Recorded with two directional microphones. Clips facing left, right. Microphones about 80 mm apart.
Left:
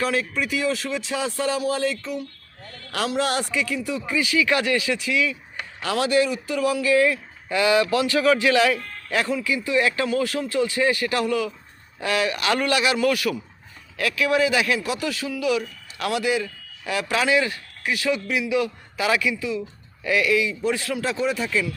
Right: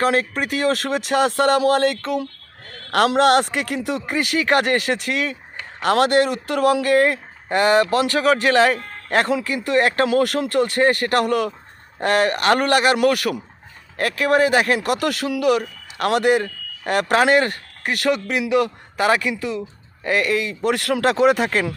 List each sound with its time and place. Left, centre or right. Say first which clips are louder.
0.0 s speech: right 5 dB; right
2.6 s a man's voice: right 9 dB; right
14.8 s speech: right 5 dB; right
20.6 s speech: right 5 dB; right